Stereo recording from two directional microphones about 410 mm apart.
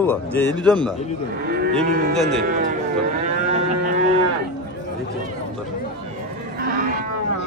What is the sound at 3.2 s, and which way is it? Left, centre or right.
Livestock, centre.